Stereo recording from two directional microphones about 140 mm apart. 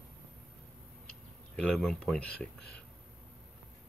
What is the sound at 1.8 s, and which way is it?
Speech, centre (ahead or behind).